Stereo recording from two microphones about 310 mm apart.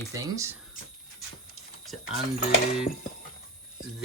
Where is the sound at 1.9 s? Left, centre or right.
Centre.